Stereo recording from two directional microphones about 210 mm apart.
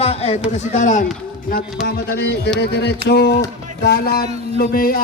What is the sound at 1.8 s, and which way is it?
A man's voice, 50° left (ahead or behind).